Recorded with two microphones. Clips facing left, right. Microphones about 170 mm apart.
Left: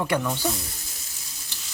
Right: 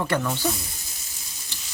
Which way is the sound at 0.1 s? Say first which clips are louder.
Even; 10° left (ahead or behind).